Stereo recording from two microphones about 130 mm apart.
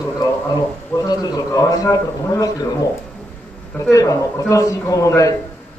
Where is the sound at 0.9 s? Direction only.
30° left (ahead or behind).